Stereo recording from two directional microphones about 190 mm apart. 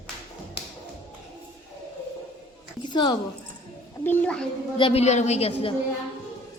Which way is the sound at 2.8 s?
25° left (ahead or behind).